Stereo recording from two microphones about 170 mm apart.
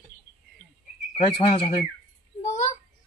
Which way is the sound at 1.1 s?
30° left (ahead or behind).